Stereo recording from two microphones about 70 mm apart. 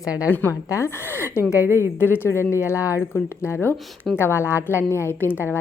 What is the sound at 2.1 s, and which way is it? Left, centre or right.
Speech, left.